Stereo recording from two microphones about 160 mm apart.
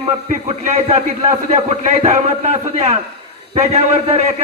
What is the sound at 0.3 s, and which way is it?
A man's voice, 45° right (ahead or behind).